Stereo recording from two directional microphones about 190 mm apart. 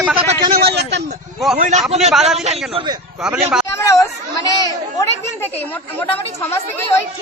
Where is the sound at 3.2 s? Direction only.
5° right (ahead or behind).